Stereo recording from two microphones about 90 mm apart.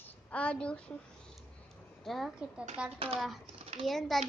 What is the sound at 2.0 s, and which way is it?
Speech, centre (ahead or behind).